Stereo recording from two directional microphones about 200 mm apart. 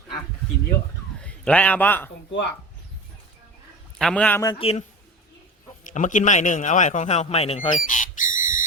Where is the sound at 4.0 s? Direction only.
5° left (ahead or behind).